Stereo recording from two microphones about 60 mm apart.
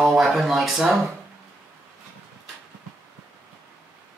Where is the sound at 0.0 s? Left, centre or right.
Centre.